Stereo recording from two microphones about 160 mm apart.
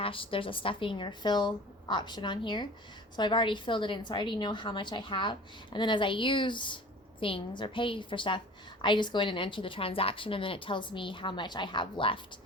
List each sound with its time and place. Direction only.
0.0 s a woman's voice: 35° left (ahead or behind)